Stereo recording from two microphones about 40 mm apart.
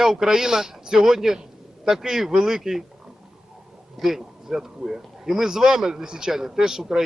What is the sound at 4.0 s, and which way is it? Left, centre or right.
Speech, centre.